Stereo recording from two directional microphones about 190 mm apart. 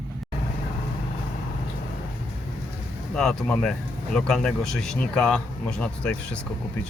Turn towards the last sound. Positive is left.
turn(degrees=5)  # may be behind; listen again after turning